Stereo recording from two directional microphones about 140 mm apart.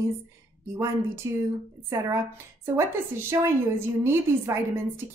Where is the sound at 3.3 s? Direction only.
20° right (ahead or behind).